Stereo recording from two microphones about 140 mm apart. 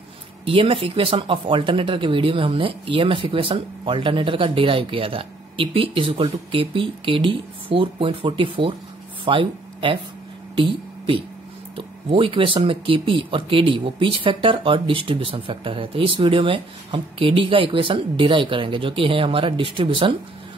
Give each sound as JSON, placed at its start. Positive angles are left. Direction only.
{"t": 0.5, "sound": "speech", "side_deg": -40}